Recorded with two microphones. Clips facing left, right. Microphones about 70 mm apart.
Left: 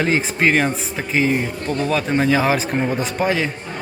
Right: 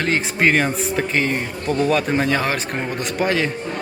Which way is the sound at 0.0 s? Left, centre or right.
Centre.